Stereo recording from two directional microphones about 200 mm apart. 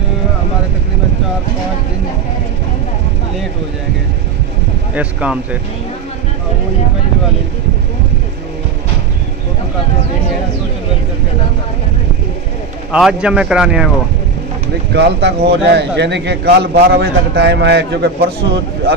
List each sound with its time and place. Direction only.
4.9 s speech: 5° right (ahead or behind)
12.9 s speech: 5° right (ahead or behind)
14.9 s a man's voice: 55° right (ahead or behind)